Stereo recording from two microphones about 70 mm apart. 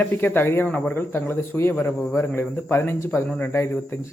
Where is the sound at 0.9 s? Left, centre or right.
Left.